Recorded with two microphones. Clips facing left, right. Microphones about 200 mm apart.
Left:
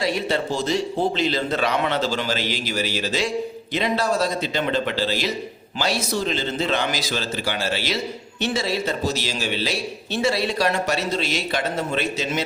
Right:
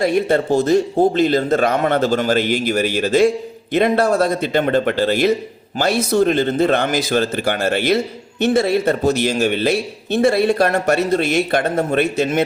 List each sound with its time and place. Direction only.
0.0 s a man's voice: 55° right (ahead or behind)